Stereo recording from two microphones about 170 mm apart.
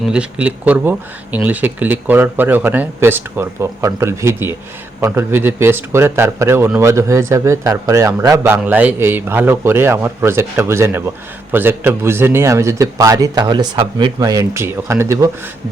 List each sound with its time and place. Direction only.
0.0 s speech: 5° right (ahead or behind)